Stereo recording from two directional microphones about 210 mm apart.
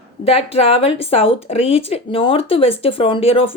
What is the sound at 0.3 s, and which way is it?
Speech, 30° left (ahead or behind).